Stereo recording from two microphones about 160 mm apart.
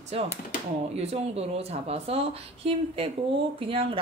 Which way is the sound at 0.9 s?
40° right (ahead or behind).